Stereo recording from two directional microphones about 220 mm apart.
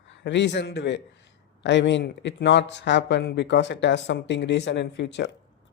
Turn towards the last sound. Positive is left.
turn(degrees=55)  # may be behind; listen again after turning